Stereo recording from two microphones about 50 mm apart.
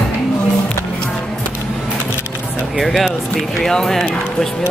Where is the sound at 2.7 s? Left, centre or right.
Centre.